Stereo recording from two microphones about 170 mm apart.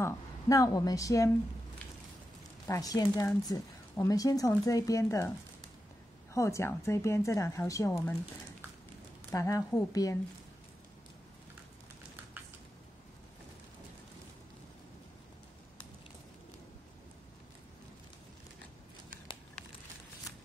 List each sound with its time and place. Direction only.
0.0 s a woman's voice: 20° left (ahead or behind)
2.6 s speech: 20° left (ahead or behind)
6.3 s a woman's voice: 15° left (ahead or behind)
9.3 s speech: 20° left (ahead or behind)